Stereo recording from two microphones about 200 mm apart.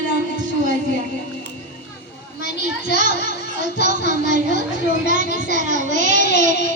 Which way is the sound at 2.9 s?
40° right (ahead or behind).